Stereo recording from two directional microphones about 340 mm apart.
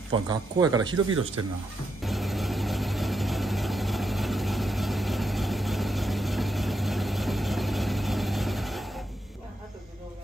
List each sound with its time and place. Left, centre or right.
0.3 s speech: centre
0.9 s speech: right
2.0 s vehicle: centre